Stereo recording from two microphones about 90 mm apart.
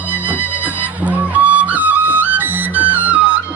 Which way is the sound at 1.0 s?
15° right (ahead or behind).